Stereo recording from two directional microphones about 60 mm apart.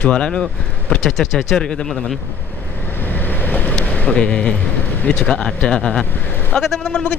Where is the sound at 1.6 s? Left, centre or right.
Centre.